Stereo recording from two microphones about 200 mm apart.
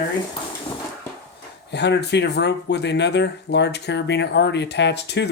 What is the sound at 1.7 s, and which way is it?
Speech, 60° left (ahead or behind).